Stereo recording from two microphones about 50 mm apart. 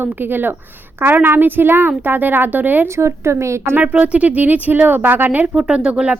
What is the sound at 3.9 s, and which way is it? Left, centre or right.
Speech, right.